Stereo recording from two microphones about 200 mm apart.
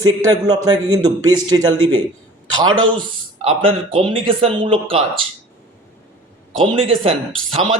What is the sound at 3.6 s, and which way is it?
Speech, 25° right (ahead or behind).